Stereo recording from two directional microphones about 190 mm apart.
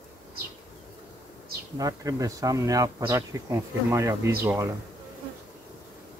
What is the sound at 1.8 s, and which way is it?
Speech, 20° right (ahead or behind).